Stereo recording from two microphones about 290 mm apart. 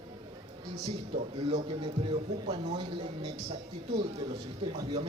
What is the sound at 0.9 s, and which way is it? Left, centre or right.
A man's voice, right.